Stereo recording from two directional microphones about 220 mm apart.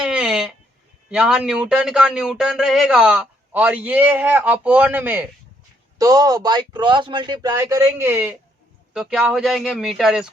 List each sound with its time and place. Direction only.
0.0 s sheep: 5° right (ahead or behind)
1.1 s a man's voice: 5° right (ahead or behind)